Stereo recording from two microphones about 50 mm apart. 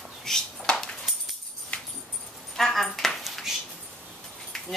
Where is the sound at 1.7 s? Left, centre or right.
Left.